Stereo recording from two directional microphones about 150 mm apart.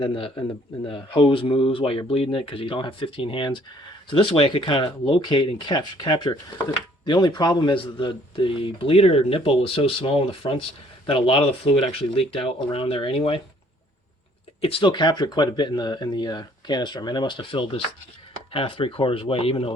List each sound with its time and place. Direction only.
0.0 s speech: 35° left (ahead or behind)
14.6 s speech: 35° left (ahead or behind)